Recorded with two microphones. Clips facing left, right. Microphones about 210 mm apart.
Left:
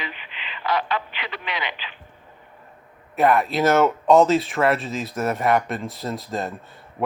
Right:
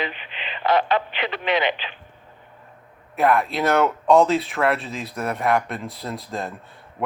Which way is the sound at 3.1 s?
Centre (ahead or behind).